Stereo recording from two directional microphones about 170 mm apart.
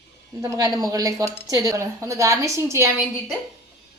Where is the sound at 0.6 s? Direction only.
20° right (ahead or behind).